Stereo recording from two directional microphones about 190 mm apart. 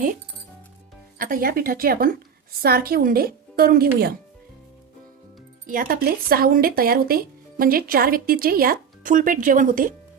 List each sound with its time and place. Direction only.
1.2 s speech: 50° right (ahead or behind)
5.6 s speech: 45° right (ahead or behind)